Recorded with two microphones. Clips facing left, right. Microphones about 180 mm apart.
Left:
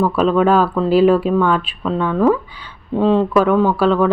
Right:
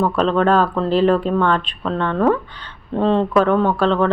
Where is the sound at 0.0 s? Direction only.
5° left (ahead or behind).